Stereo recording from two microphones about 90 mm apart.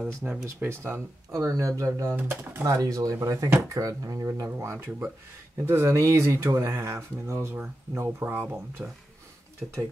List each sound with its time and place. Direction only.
0.0 s speech: 15° right (ahead or behind)
0.5 s speech: 30° right (ahead or behind)
4.3 s speech: 30° right (ahead or behind)